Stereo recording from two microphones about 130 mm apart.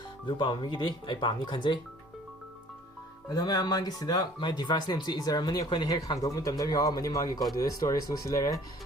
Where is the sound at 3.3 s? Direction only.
30° left (ahead or behind).